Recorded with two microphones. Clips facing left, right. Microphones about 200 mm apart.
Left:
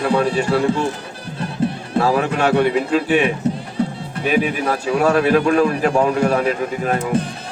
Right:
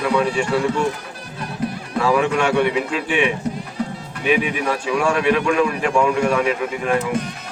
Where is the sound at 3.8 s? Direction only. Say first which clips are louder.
Left 4 dB; 30° left (ahead or behind).